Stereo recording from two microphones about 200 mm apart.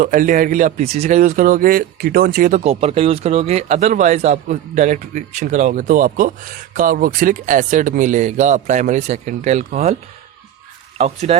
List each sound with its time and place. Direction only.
0.0 s a man's voice: 45° right (ahead or behind)
2.6 s speech: 30° right (ahead or behind)
10.9 s speech: 35° right (ahead or behind)